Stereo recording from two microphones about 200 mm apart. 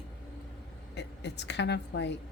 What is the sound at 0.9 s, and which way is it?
A woman's voice, 60° left (ahead or behind).